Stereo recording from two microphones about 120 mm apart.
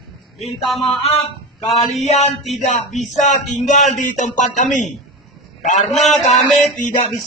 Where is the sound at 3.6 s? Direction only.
90° left.